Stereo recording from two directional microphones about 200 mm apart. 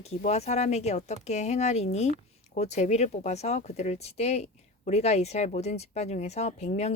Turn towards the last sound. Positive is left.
turn(degrees=35)  # may be behind; listen again after turning